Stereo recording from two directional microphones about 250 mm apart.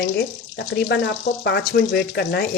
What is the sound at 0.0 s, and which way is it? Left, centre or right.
Speech, left.